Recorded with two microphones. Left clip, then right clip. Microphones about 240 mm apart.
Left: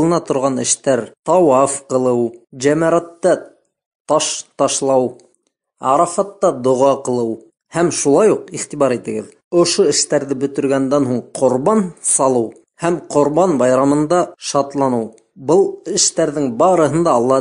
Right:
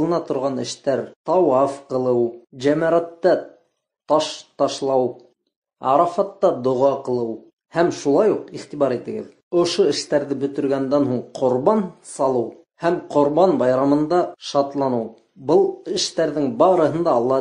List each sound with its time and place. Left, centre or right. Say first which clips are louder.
0.0 s speech: left 5 dB; left